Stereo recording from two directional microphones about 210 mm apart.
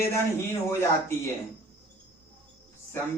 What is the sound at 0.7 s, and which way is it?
Speech, 10° left (ahead or behind).